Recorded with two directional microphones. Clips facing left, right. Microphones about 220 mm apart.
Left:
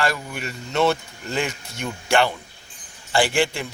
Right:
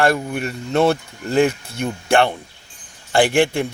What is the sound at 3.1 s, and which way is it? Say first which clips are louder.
Speech: right 5 dB; 55° right (ahead or behind).